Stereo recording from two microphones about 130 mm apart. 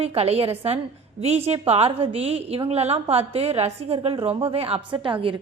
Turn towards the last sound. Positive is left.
turn(degrees=-45)  # may be behind; listen again after turning